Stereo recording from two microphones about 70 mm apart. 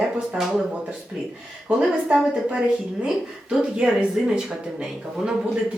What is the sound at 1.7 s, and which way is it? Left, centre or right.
A woman's voice, centre.